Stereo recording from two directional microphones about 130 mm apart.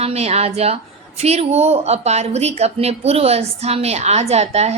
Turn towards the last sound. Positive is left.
turn(degrees=-55)  # may be behind; listen again after turning